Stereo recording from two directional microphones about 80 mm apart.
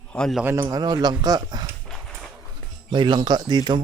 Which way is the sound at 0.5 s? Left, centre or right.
Right.